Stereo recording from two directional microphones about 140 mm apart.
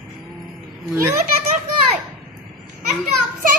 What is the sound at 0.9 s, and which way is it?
Speech, 15° right (ahead or behind).